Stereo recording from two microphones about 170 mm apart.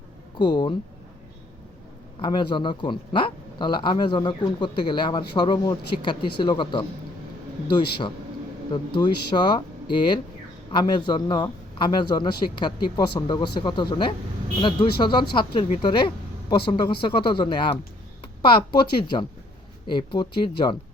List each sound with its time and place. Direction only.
0.3 s speech: 30° left (ahead or behind)
2.2 s speech: 30° left (ahead or behind)